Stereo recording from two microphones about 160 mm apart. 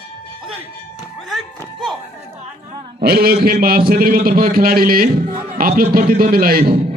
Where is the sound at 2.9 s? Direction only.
75° right (ahead or behind).